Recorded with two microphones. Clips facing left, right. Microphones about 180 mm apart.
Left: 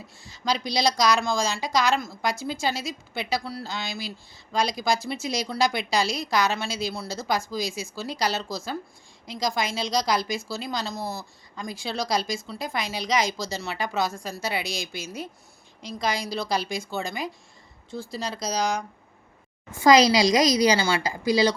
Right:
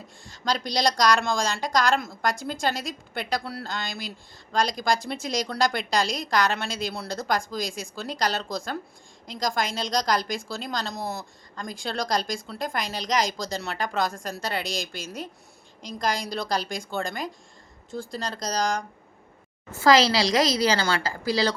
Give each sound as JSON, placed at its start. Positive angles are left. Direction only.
{"t": 0.4, "sound": "a woman's voice", "side_deg": 5}
{"t": 10.9, "sound": "speech", "side_deg": -20}
{"t": 11.5, "sound": "a woman's voice", "side_deg": 5}